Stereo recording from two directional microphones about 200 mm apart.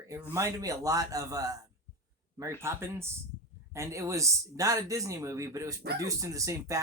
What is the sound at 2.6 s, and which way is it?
Speech, 10° right (ahead or behind).